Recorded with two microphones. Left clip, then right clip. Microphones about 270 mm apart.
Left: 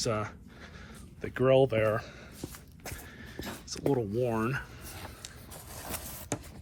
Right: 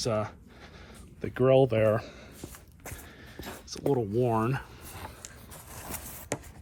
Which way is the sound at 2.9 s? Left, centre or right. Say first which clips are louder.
Left 1 dB; centre.